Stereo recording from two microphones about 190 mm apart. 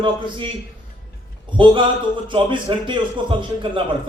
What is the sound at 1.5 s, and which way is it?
A man's voice, 25° right (ahead or behind).